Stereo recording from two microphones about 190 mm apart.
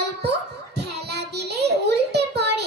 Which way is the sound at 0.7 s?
60° right (ahead or behind).